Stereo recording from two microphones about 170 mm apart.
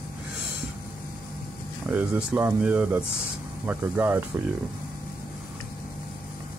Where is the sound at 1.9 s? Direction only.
10° right (ahead or behind).